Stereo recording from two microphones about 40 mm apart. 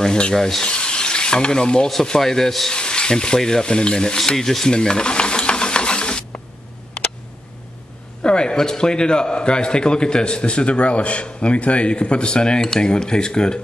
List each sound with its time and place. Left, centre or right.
0.0 s rub: centre
0.7 s stir: left
2.1 s rub: centre
2.7 s a man's voice: left
4.3 s rub: centre
4.6 s stir: left
8.2 s a man's voice: left